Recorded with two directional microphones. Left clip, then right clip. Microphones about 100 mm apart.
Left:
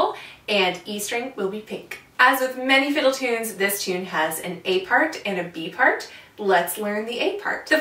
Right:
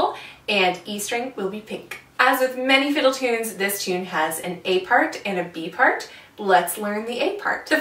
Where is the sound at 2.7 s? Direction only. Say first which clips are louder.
Left 1 dB; 10° right (ahead or behind).